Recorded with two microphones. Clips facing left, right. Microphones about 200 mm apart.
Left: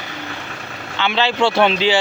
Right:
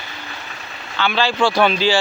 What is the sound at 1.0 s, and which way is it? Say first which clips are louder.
Speech: even; 20° left (ahead or behind).